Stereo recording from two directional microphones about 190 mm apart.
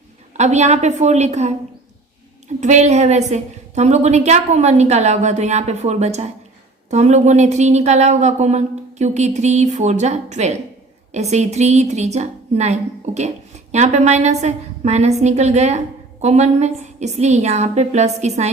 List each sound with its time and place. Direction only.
0.3 s a woman's voice: 35° right (ahead or behind)
2.6 s a woman's voice: 40° right (ahead or behind)